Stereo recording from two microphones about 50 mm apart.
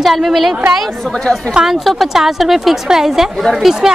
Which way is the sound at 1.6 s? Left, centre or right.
Centre.